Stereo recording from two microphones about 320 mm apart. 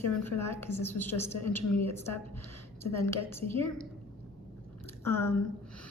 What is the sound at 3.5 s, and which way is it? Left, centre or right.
Speech, centre.